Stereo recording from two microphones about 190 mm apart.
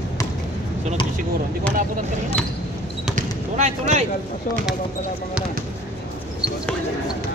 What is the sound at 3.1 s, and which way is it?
Basketball bounce, 40° right (ahead or behind).